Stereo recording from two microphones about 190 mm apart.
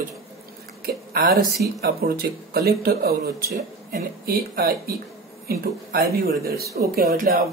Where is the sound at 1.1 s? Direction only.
50° right (ahead or behind).